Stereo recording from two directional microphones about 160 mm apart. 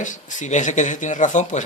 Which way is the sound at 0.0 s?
50° left (ahead or behind).